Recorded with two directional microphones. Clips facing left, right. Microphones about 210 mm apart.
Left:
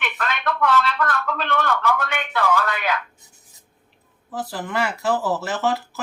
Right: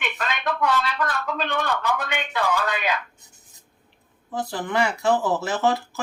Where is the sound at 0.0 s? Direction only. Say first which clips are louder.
Left 1 dB; 15° right (ahead or behind).